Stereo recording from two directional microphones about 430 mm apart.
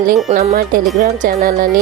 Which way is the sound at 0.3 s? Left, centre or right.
Centre.